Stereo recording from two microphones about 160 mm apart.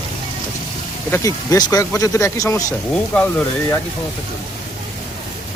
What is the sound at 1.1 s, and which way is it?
Speech, 20° left (ahead or behind).